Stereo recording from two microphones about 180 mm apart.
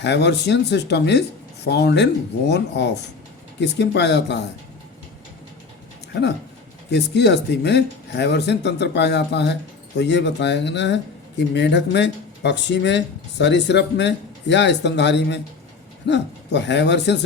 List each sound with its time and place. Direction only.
0.0 s speech: 70° left (ahead or behind)
6.9 s speech: 70° left (ahead or behind)